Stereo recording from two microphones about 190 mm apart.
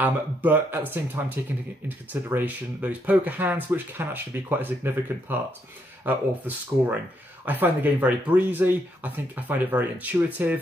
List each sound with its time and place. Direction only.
0.0 s speech: 10° right (ahead or behind)